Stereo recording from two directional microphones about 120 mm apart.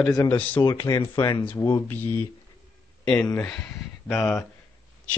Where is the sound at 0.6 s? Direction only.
35° left (ahead or behind).